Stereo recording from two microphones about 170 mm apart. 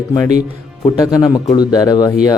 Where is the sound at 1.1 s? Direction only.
20° left (ahead or behind).